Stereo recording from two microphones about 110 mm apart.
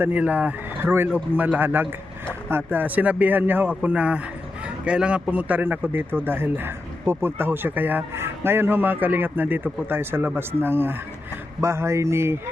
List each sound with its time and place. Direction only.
0.0 s speech: 15° right (ahead or behind)